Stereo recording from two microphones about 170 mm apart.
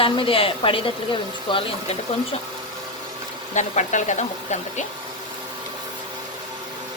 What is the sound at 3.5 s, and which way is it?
Speech, 45° left (ahead or behind).